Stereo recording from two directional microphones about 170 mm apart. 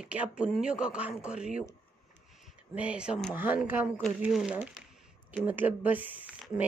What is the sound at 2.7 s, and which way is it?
Speech, 5° right (ahead or behind).